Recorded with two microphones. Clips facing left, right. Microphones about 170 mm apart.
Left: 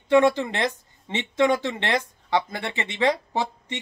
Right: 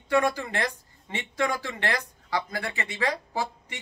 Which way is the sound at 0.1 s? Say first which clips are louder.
Left 6 dB; 25° left (ahead or behind).